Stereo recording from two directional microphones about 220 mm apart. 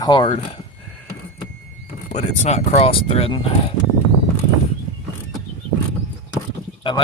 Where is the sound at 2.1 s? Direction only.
30° left (ahead or behind).